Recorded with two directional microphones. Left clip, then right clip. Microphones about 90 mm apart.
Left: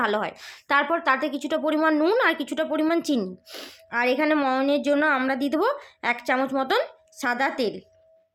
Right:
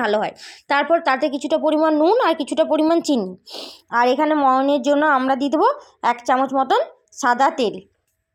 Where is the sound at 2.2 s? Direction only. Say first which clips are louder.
Right 5 dB; 30° right (ahead or behind).